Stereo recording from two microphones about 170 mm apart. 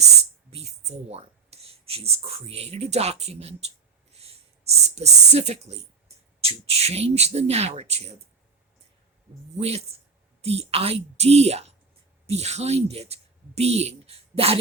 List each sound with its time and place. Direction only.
0.5 s speech: 40° right (ahead or behind)
9.6 s speech: 35° right (ahead or behind)